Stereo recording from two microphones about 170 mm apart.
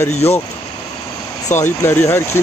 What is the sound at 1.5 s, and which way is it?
Speech, 15° left (ahead or behind).